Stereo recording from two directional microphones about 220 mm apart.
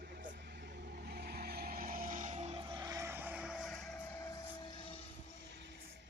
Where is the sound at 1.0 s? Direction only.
45° right (ahead or behind); by 2.6 s 30° right (ahead or behind).